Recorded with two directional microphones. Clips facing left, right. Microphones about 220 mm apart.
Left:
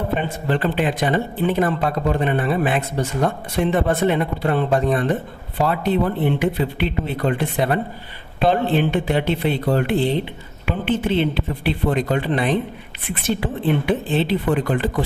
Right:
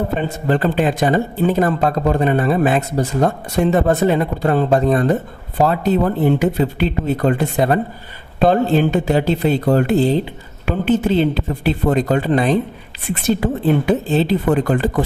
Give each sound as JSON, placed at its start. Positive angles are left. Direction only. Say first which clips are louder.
{"t": 0.4, "sound": "speech", "louder": "right 5 dB", "side_deg": -40}